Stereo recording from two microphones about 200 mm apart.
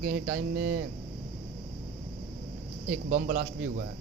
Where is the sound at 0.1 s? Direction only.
55° right (ahead or behind).